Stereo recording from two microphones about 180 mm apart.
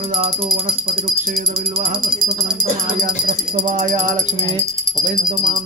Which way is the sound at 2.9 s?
50° right (ahead or behind).